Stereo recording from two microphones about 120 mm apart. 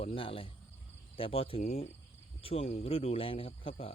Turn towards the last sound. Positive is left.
turn(degrees=50)  # may be behind; listen again after turning